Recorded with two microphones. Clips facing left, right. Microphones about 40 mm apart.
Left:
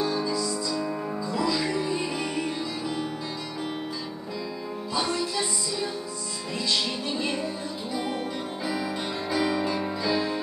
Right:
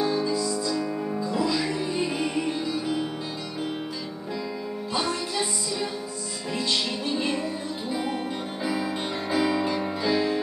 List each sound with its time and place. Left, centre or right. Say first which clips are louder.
0.0 s music: right 2 dB; centre
8.6 s music: right 2 dB; centre